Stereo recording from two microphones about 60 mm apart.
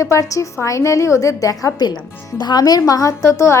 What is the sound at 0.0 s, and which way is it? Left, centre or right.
A woman's voice, left.